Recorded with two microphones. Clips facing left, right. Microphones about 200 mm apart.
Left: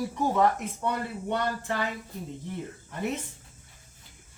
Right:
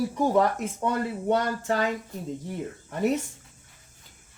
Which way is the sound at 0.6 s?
45° right (ahead or behind).